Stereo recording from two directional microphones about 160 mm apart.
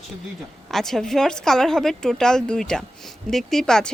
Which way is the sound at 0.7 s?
Centre (ahead or behind).